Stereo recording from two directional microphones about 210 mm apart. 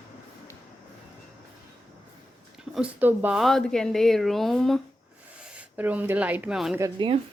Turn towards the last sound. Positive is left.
turn(degrees=-15)  # may be behind; listen again after turning